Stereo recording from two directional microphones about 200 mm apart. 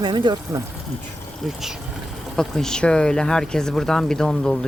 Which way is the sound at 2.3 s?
Centre (ahead or behind).